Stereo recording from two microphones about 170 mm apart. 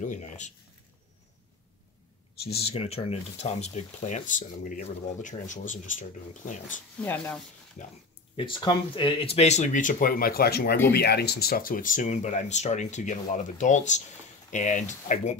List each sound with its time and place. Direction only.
0.0 s speech: 45° left (ahead or behind)
2.5 s speech: 35° left (ahead or behind)
7.0 s speech: 10° left (ahead or behind)
8.4 s speech: 30° left (ahead or behind); by 15.3 s 45° left (ahead or behind)